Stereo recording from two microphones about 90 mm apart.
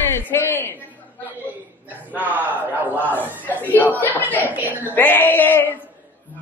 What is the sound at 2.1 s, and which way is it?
Speech, 20° right (ahead or behind).